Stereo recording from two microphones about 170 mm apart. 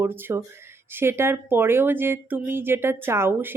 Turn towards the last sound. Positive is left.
turn(degrees=-15)  # may be behind; listen again after turning